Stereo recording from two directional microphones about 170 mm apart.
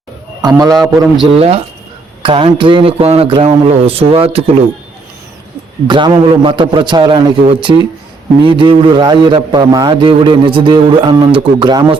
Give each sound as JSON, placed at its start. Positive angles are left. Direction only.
{"t": 0.4, "sound": "a man's voice", "side_deg": -20}
{"t": 1.4, "sound": "a man's voice", "side_deg": -35}
{"t": 5.9, "sound": "a man's voice", "side_deg": -30}